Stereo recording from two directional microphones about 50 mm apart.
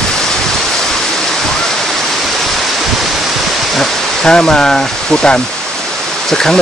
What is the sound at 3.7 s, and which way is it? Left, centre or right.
Speech, centre.